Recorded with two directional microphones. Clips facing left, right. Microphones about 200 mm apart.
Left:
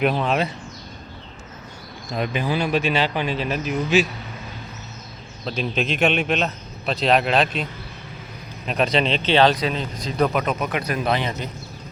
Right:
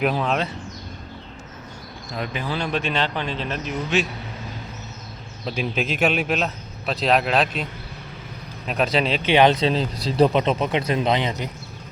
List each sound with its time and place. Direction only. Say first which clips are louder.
0.0 s a man's voice: left 1 dB; centre (ahead or behind)
2.1 s speech: left 4 dB; 20° left (ahead or behind)
5.5 s a man's voice: left 1 dB; 10° right (ahead or behind)